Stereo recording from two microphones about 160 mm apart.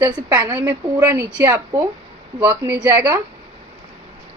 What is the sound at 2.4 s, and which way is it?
Speech, 10° right (ahead or behind).